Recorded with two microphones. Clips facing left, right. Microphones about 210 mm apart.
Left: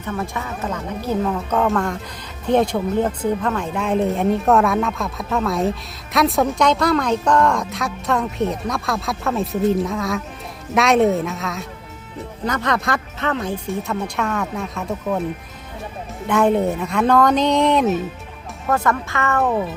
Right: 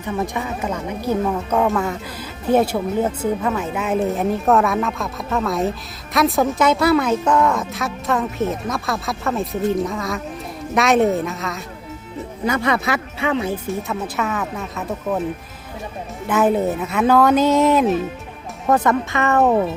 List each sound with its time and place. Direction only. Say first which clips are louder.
0.0 s a woman's voice: right 3 dB; 15° right (ahead or behind)
16.2 s a woman's voice: even; 5° right (ahead or behind)
18.7 s speech: right 3 dB; 20° right (ahead or behind)